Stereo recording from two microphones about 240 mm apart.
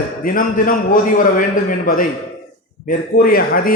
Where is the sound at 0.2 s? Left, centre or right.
Left.